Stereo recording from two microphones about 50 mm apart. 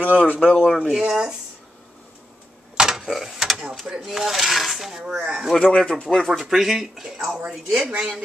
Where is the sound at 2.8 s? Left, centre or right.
Centre.